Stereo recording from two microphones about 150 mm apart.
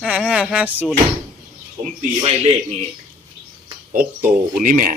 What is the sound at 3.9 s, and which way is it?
Speech, 60° right (ahead or behind).